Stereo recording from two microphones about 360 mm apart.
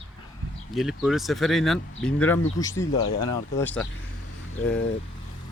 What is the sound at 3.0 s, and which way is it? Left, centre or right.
Speech, left.